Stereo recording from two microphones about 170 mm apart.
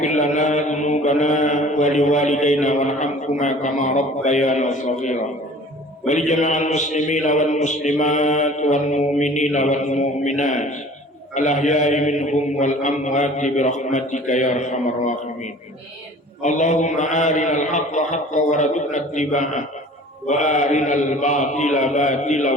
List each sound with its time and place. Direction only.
0.0 s mantra: 45° left (ahead or behind)
6.1 s a man's voice: 45° left (ahead or behind)
16.4 s a man's voice: 45° left (ahead or behind)